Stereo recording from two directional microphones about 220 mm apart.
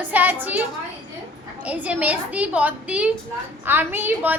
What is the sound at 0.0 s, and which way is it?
Speech, 5° right (ahead or behind).